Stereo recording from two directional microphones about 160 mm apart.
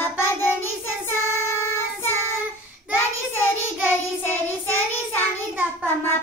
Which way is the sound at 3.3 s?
15° left (ahead or behind).